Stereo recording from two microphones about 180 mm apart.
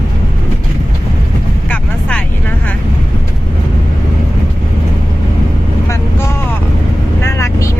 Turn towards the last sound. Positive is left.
turn(degrees=15)  # may be behind; listen again after turning